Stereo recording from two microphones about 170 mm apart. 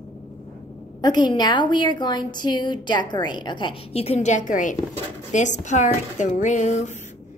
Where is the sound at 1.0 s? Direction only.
25° left (ahead or behind).